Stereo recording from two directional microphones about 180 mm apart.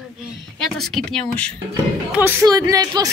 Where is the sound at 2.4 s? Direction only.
20° right (ahead or behind).